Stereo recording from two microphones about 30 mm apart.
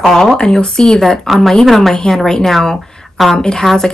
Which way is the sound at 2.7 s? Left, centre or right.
Centre.